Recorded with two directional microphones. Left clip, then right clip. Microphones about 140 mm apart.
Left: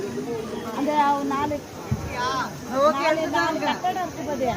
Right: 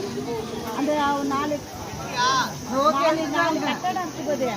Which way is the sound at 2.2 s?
10° right (ahead or behind).